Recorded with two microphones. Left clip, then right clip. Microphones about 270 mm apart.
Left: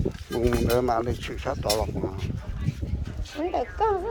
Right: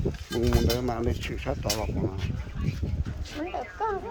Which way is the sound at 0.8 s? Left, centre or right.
Centre.